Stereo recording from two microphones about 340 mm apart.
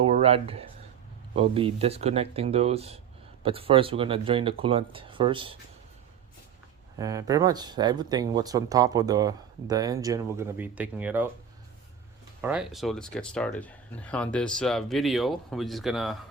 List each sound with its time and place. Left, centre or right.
0.0 s a sound: centre
1.4 s speech: centre
7.0 s speech: centre
12.4 s speech: centre